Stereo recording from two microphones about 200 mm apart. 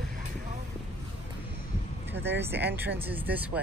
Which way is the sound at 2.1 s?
60° right (ahead or behind).